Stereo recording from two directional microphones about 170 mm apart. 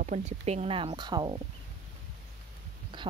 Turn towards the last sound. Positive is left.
turn(degrees=-30)  # may be behind; listen again after turning